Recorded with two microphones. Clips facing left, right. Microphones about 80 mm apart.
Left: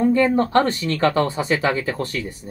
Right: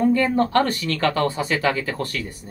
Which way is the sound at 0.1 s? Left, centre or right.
Left.